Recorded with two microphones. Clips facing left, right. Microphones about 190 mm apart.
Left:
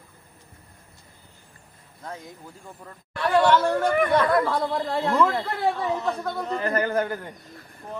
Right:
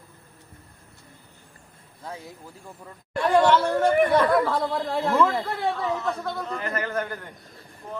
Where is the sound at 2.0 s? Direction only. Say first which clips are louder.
Even; 10° right (ahead or behind).